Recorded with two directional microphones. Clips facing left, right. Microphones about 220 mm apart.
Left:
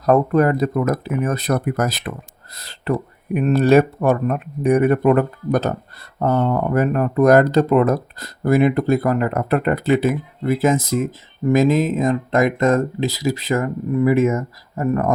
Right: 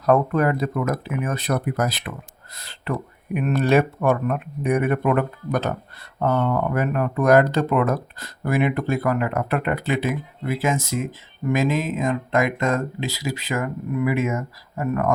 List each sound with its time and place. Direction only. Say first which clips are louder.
0.0 s speech: left 4 dB; 40° left (ahead or behind)